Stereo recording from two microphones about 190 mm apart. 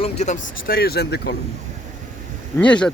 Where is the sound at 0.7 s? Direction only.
55° left (ahead or behind).